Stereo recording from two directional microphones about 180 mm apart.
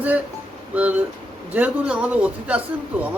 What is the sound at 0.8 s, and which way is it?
A man's voice, 10° right (ahead or behind).